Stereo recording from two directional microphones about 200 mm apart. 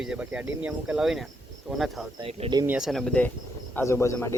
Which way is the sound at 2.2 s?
30° right (ahead or behind).